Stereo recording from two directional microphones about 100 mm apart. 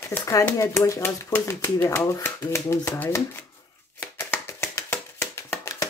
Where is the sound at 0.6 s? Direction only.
30° left (ahead or behind).